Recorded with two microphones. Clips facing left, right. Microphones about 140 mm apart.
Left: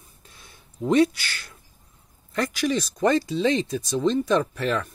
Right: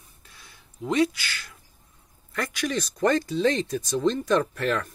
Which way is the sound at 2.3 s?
25° left (ahead or behind).